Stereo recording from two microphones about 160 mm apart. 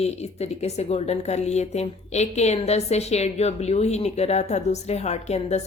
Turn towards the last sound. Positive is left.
turn(degrees=45)  # may be behind; listen again after turning